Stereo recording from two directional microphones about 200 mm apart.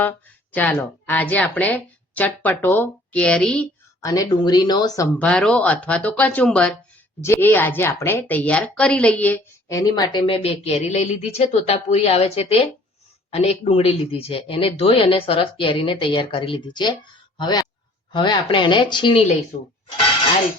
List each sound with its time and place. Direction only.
0.5 s a woman's voice: 10° left (ahead or behind)
4.0 s a woman's voice: 15° left (ahead or behind)
5.2 s a woman's voice: 5° left (ahead or behind); by 19.4 s 25° left (ahead or behind)